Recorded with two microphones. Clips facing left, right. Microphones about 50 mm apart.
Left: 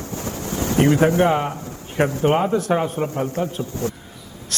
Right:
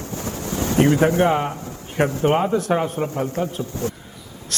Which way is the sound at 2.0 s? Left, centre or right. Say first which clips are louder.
Even; left.